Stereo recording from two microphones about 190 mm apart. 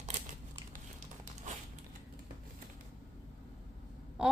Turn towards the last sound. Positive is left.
turn(degrees=-5)  # may be behind; listen again after turning